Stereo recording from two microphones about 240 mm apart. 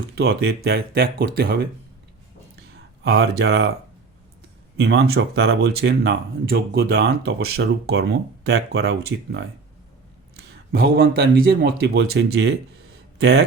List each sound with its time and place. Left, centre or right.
0.2 s speech: right
3.0 s speech: right
4.8 s speech: right